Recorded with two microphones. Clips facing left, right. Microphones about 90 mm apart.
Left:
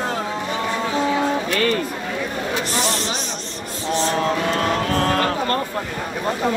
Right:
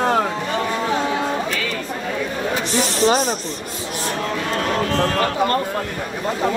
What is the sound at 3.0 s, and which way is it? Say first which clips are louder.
Speech: right 10 dB; 45° right (ahead or behind).